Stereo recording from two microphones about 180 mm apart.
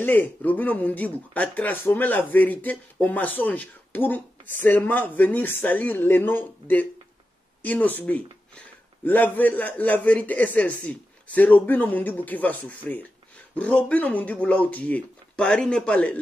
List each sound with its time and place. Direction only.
0.0 s speech: 10° left (ahead or behind)